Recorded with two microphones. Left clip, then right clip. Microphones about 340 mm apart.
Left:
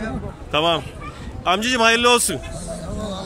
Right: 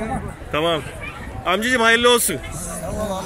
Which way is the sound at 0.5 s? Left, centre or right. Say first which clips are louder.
Left 2 dB; centre.